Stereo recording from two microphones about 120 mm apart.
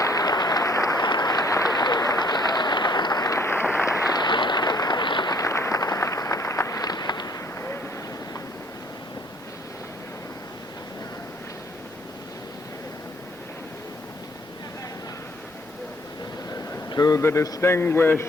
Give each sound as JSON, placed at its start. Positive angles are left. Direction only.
{"t": 0.0, "sound": "applause", "side_deg": 30}
{"t": 16.9, "sound": "a man's voice", "side_deg": 30}